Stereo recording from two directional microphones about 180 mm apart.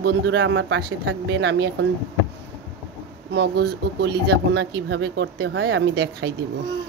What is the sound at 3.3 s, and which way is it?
Speech, 65° right (ahead or behind).